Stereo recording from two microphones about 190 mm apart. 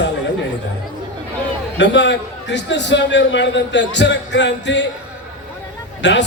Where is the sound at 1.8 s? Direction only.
70° left (ahead or behind).